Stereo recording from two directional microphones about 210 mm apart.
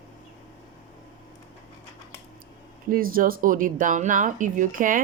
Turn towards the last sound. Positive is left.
turn(degrees=-40)  # may be behind; listen again after turning